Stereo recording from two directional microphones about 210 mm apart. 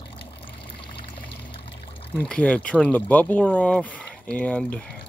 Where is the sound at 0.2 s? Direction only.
25° left (ahead or behind).